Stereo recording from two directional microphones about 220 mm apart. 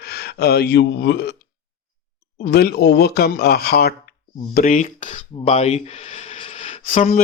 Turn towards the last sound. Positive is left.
turn(degrees=35)  # may be behind; listen again after turning